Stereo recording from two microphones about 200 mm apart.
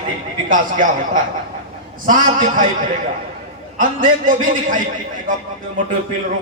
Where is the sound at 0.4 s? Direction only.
40° right (ahead or behind).